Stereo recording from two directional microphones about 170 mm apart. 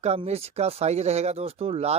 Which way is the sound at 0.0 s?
40° right (ahead or behind).